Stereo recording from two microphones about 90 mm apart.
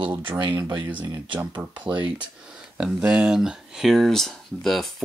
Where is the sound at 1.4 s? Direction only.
15° right (ahead or behind).